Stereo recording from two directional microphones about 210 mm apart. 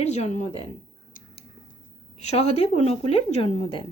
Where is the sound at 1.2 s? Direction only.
40° left (ahead or behind).